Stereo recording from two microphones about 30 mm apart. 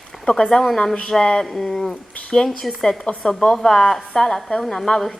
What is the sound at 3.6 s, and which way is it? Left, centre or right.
A woman's voice, centre.